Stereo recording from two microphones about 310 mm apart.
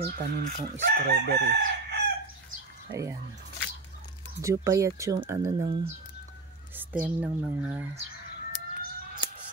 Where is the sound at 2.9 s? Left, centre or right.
Centre.